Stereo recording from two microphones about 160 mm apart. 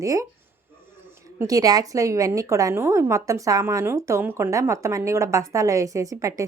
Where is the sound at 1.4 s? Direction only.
20° right (ahead or behind).